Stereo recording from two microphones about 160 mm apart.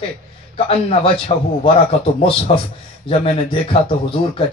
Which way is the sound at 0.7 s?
35° left (ahead or behind).